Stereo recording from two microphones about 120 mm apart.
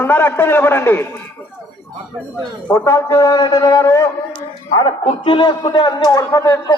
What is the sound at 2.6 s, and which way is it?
A man's voice, 25° left (ahead or behind).